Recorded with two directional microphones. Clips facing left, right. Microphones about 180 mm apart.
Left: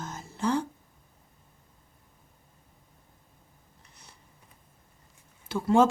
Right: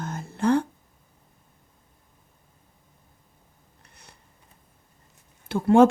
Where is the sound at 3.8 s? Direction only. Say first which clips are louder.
Right 3 dB; 60° right (ahead or behind).